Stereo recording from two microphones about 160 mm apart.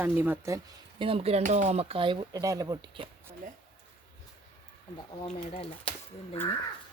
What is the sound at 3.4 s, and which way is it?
Speech, 55° right (ahead or behind).